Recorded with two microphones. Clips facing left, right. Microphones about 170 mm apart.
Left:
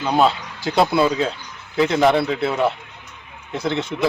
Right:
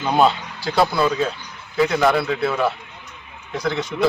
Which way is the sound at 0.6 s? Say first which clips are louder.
Left 2 dB; 25° left (ahead or behind).